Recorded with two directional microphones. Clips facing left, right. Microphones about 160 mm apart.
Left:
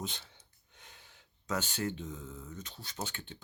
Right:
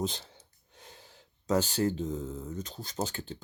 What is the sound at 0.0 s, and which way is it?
Speech, 35° right (ahead or behind).